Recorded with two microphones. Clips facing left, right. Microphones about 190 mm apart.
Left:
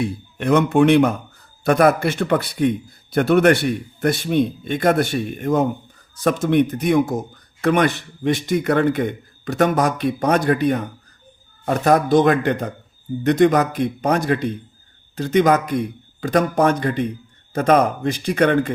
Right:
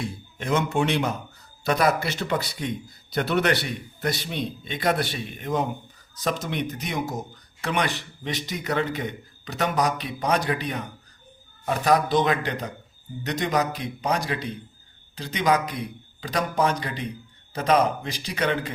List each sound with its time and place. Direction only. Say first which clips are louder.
0.0 s a man's voice: left 9 dB; 60° left (ahead or behind)